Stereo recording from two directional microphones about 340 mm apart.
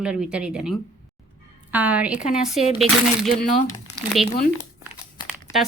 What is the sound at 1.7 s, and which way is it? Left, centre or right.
Speech, centre.